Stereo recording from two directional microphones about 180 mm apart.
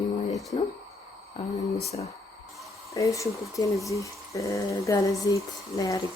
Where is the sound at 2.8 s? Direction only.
15° left (ahead or behind).